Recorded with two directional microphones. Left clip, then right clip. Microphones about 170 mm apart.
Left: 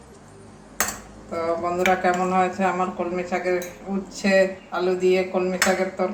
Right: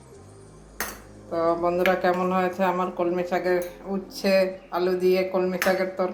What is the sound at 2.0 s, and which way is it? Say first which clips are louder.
Speech: left 2 dB; 50° right (ahead or behind).